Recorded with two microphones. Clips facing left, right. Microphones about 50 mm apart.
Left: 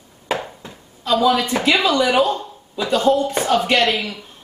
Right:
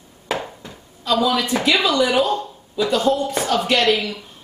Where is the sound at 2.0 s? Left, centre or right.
Centre.